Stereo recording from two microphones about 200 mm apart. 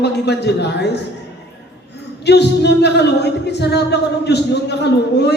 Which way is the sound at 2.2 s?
55° left (ahead or behind).